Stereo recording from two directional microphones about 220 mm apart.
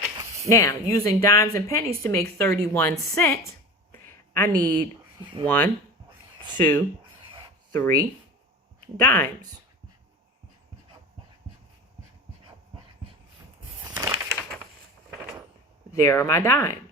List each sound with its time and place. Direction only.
0.4 s speech: 15° left (ahead or behind)
3.9 s a sound: 10° left (ahead or behind)
4.6 s speech: 10° left (ahead or behind)
5.1 s speech: 20° right (ahead or behind)
5.5 s speech: 10° left (ahead or behind)
9.0 s speech: 10° left (ahead or behind)
13.8 s crushing: 15° right (ahead or behind)
15.9 s speech: 15° left (ahead or behind)